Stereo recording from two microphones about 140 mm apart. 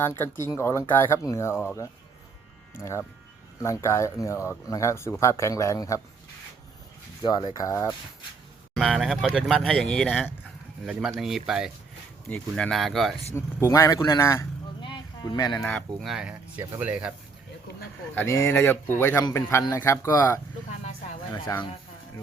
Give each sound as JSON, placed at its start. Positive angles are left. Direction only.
{"t": 0.0, "sound": "speech", "side_deg": 15}
{"t": 7.2, "sound": "speech", "side_deg": 30}
{"t": 8.7, "sound": "speech", "side_deg": 0}
{"t": 12.3, "sound": "speech", "side_deg": 5}
{"t": 13.3, "sound": "speech", "side_deg": 20}
{"t": 14.8, "sound": "a sound", "side_deg": 35}
{"t": 16.0, "sound": "speech", "side_deg": -5}
{"t": 18.1, "sound": "speech", "side_deg": 20}
{"t": 21.5, "sound": "speech", "side_deg": 25}